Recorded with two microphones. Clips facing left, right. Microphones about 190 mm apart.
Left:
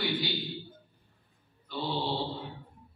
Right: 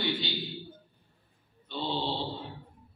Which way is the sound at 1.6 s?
25° right (ahead or behind).